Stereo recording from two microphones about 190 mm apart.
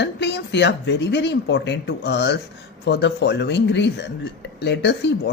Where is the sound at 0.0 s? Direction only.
65° left (ahead or behind).